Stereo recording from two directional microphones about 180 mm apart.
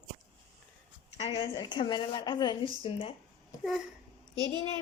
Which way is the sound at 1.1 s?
35° left (ahead or behind).